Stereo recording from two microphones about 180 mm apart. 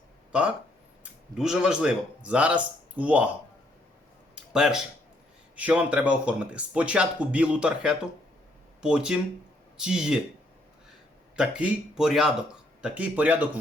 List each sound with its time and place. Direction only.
0.3 s speech: 5° right (ahead or behind)
4.5 s speech: 5° right (ahead or behind)
11.3 s speech: 5° right (ahead or behind)